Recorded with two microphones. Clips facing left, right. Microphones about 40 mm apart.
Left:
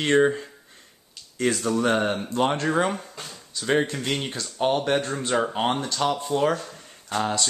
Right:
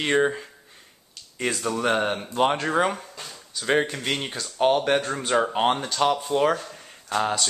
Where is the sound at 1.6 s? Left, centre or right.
Centre.